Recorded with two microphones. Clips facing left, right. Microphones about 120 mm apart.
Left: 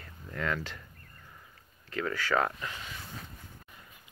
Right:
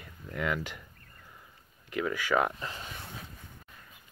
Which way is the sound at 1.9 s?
15° right (ahead or behind).